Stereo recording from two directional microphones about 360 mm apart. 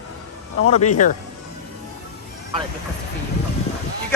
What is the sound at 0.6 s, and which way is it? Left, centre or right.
Speech, left.